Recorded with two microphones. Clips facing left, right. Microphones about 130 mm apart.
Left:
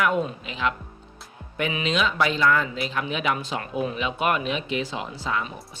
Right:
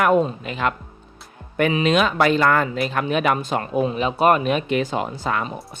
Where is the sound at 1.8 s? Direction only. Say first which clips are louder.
Right 4 dB; 55° right (ahead or behind).